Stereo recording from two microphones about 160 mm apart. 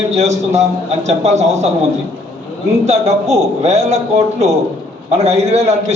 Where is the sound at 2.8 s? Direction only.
40° right (ahead or behind).